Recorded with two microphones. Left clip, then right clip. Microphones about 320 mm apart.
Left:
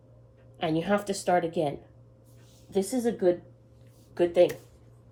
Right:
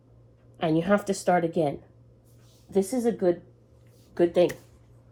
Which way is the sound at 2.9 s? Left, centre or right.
Centre.